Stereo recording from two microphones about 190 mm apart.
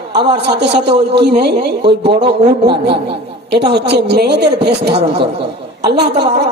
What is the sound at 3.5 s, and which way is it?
Speech, 60° right (ahead or behind).